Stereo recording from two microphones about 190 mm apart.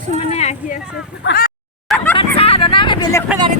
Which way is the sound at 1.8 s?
5° left (ahead or behind).